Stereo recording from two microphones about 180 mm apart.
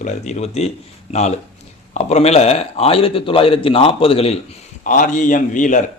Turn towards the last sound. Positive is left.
turn(degrees=45)  # may be behind; listen again after turning